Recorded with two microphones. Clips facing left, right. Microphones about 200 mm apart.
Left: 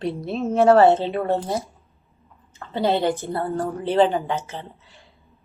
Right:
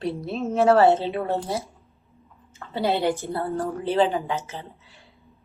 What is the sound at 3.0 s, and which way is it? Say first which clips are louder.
Speech: left 2 dB; 5° right (ahead or behind).